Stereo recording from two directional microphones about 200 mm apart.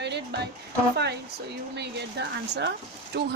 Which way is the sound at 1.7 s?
55° right (ahead or behind).